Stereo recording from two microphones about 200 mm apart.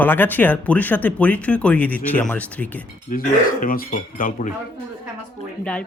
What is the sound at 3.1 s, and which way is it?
Speech, 45° left (ahead or behind).